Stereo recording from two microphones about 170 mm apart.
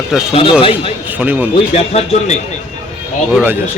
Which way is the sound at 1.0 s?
10° right (ahead or behind).